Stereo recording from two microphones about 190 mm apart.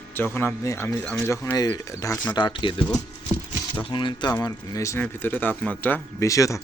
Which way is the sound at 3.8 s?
25° left (ahead or behind).